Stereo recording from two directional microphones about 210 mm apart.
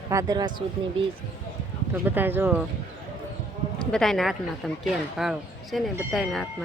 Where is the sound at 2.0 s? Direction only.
10° right (ahead or behind).